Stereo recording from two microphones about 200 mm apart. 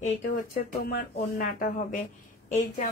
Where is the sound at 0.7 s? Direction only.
50° left (ahead or behind).